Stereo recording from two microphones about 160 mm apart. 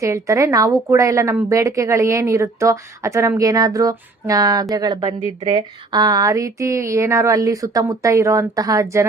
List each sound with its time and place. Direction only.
0.0 s a woman's voice: 20° right (ahead or behind)